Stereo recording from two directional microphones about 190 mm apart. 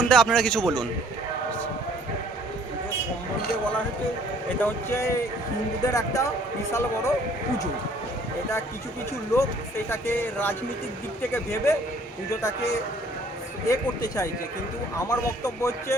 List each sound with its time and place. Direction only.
0.0 s a man's voice: 5° left (ahead or behind)
4.4 s speech: 10° left (ahead or behind)
9.9 s speech: 10° left (ahead or behind)